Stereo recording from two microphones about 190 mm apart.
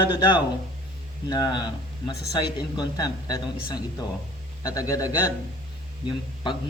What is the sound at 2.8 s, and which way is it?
A man's voice, 20° left (ahead or behind).